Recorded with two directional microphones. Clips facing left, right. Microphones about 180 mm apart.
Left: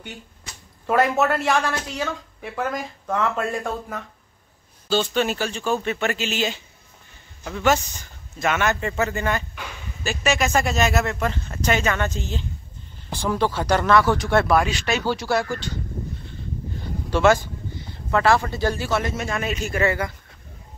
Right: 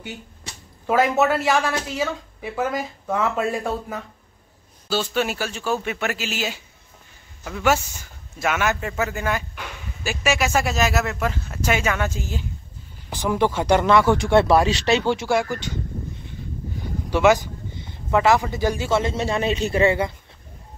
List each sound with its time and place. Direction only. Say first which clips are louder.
0.8 s a man's voice: right 1 dB; centre (ahead or behind); by 15.2 s 25° right (ahead or behind)
15.2 s speech: right 1 dB; 15° right (ahead or behind)
17.1 s a man's voice: right 1 dB; 15° right (ahead or behind)